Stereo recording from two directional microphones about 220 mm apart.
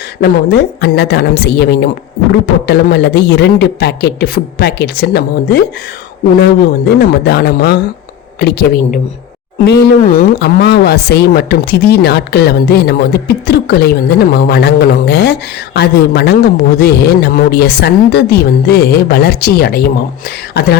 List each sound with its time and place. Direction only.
0.2 s speech: 45° left (ahead or behind)